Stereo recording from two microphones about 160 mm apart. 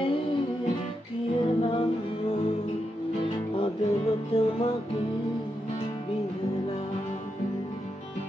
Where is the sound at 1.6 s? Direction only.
35° left (ahead or behind).